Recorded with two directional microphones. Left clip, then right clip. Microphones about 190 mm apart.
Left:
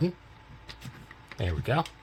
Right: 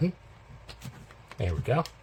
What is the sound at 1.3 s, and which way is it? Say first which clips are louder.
Speech: even; 5° left (ahead or behind).